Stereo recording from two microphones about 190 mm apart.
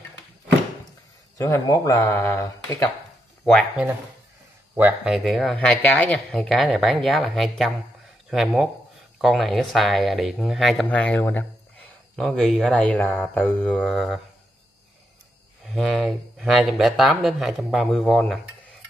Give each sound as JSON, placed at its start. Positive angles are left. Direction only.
{"t": 1.4, "sound": "speech", "side_deg": 15}
{"t": 3.4, "sound": "speech", "side_deg": 0}
{"t": 15.6, "sound": "speech", "side_deg": -5}